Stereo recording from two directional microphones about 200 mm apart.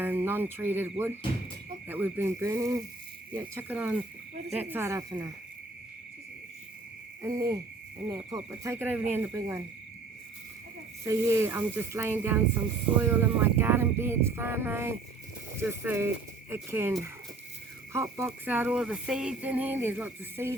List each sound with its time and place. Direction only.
0.0 s speech: 10° right (ahead or behind)
7.2 s speech: 15° right (ahead or behind)
11.0 s speech: 15° right (ahead or behind)